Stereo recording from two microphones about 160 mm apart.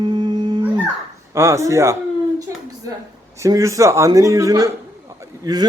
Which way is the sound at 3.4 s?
20° right (ahead or behind).